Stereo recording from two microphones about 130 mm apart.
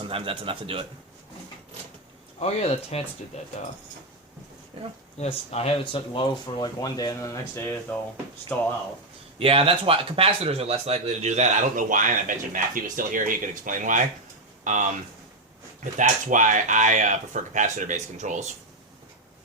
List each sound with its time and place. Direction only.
0.0 s speech: 45° right (ahead or behind)
2.4 s speech: 55° left (ahead or behind)
5.1 s speech: 55° left (ahead or behind); by 7.8 s 25° left (ahead or behind)
8.5 s speech: 10° left (ahead or behind)
9.4 s speech: 45° right (ahead or behind); by 14.0 s 85° right
14.6 s speech: 70° right (ahead or behind)